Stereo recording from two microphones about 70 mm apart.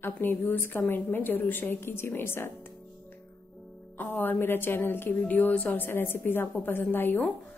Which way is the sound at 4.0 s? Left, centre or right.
Left.